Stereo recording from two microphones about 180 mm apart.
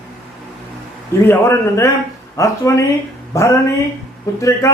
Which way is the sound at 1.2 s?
15° left (ahead or behind).